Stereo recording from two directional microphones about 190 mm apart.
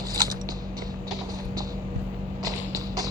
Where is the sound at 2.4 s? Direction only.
20° right (ahead or behind).